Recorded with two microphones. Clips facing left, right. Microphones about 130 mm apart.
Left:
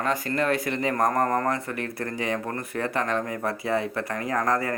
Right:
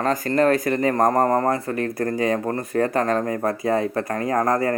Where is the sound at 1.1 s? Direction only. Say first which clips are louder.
Right 5 dB; 30° right (ahead or behind).